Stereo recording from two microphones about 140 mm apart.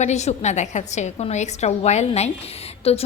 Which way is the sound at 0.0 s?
55° left (ahead or behind).